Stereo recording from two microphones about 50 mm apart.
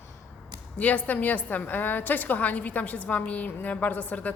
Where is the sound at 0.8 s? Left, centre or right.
Left.